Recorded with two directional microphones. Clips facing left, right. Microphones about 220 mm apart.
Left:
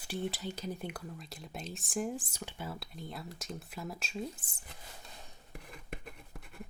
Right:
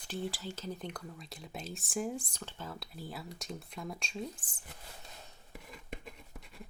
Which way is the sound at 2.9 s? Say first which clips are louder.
Even; 5° right (ahead or behind).